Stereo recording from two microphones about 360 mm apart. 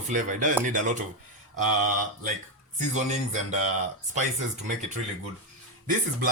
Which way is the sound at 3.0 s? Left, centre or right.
Centre.